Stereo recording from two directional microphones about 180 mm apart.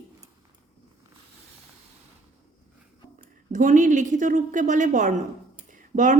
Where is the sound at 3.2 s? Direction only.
45° right (ahead or behind).